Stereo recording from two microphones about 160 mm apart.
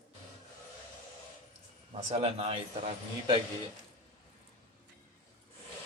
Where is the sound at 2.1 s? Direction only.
40° right (ahead or behind).